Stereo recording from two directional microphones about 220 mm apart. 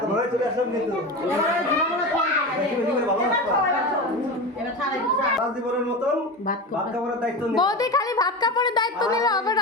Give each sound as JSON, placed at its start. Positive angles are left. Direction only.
{"t": 7.5, "sound": "a woman's voice", "side_deg": 20}